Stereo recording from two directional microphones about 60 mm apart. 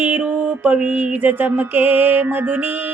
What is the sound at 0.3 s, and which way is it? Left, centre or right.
Music, right.